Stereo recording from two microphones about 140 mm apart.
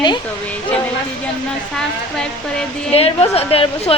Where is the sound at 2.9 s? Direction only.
45° left (ahead or behind).